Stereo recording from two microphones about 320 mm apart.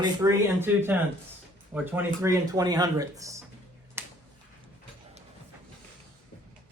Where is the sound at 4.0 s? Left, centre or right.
Centre.